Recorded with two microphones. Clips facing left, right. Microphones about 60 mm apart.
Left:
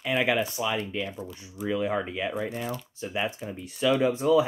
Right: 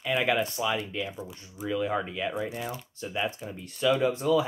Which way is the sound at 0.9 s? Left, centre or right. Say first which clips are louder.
Left 1 dB; centre.